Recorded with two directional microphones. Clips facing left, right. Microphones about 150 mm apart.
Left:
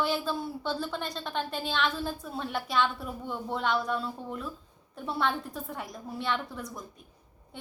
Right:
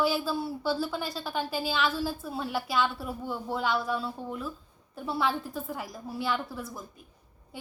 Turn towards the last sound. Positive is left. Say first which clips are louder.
# right 1 dB
turn(degrees=-5)  # may be behind; listen again after turning